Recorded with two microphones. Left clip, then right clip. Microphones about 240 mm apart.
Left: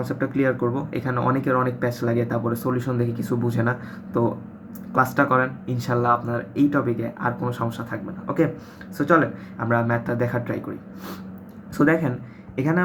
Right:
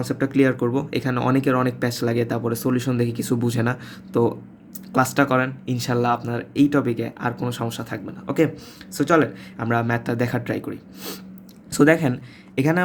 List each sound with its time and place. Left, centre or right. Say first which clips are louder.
0.0 s speech: right 3 dB; right